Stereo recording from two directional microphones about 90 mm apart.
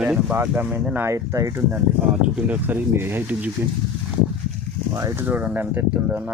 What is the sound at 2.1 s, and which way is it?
Speech, 15° right (ahead or behind).